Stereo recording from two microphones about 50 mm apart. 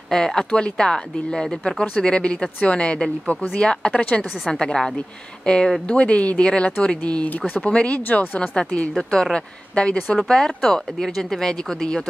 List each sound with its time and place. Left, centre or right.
0.1 s speech: centre
8.0 s speech: left
8.4 s speech: left